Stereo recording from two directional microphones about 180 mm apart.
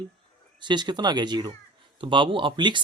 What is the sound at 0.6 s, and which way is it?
A man's voice, 25° right (ahead or behind).